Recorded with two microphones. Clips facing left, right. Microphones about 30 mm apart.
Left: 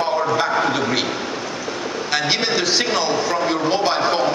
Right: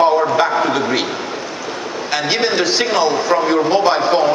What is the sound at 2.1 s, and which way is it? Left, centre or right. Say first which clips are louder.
A man's voice: right 3 dB; centre.